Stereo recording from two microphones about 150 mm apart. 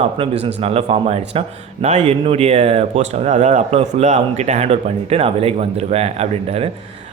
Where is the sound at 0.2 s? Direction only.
40° right (ahead or behind).